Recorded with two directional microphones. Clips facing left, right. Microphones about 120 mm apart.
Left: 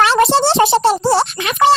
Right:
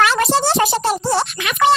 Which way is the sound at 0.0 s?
30° left (ahead or behind).